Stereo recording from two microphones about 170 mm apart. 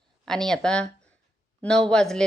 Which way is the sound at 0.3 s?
5° left (ahead or behind).